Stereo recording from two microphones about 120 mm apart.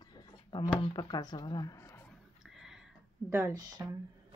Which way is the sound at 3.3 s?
30° right (ahead or behind).